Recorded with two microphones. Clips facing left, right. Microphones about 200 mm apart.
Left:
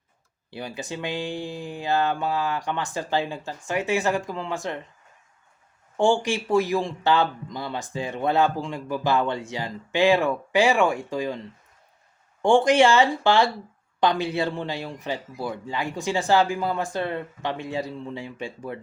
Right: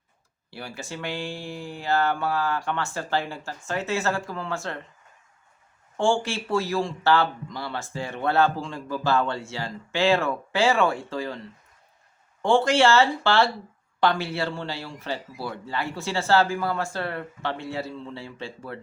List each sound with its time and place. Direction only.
0.5 s speech: 20° left (ahead or behind)
6.0 s speech: 15° left (ahead or behind)
12.4 s speech: 15° left (ahead or behind)